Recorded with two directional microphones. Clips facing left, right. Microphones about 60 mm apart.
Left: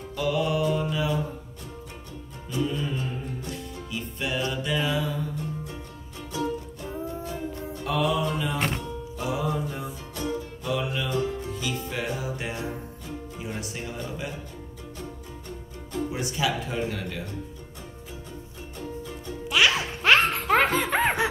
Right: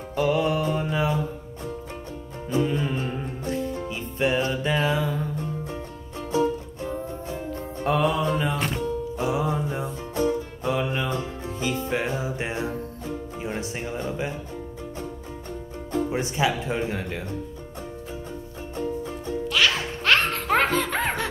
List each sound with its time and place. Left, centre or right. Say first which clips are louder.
0.1 s music: right 3 dB; right
2.5 s music: right 4 dB; right
9.1 s music: right 1 dB; right
15.9 s speech: right 4 dB; right
18.8 s music: right 7 dB; right
19.4 s music: left 1 dB; centre
20.3 s laughter: even; centre